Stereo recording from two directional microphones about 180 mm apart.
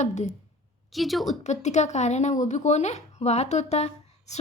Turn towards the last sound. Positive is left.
turn(degrees=40)  # may be behind; listen again after turning